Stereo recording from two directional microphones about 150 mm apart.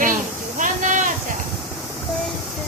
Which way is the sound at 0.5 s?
60° right (ahead or behind).